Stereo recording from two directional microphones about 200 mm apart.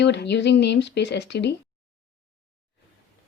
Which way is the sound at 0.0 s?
60° left (ahead or behind).